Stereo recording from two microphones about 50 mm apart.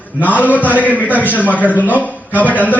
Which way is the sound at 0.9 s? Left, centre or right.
Right.